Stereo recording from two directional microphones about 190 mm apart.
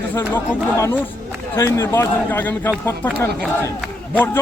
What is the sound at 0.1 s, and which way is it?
A man's voice, 10° left (ahead or behind).